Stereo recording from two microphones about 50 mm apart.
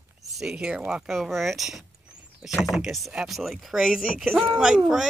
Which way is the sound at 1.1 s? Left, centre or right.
Centre.